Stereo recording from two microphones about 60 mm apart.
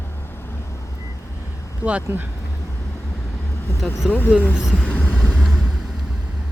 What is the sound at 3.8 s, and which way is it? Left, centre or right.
Speech, centre.